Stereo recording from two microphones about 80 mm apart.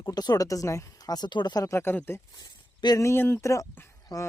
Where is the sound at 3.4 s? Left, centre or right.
Left.